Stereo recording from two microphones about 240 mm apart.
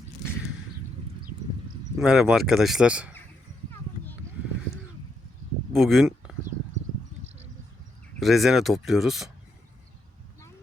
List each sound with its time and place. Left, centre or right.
2.0 s speech: centre
4.4 s a sound: centre
5.7 s speech: centre
8.2 s speech: centre